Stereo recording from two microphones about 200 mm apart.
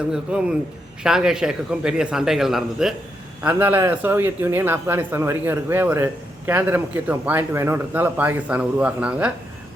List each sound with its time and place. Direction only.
0.1 s a man's voice: 5° right (ahead or behind)